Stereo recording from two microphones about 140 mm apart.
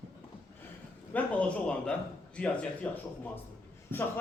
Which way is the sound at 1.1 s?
10° left (ahead or behind).